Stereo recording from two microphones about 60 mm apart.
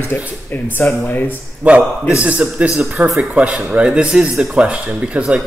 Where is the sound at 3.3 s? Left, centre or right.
Centre.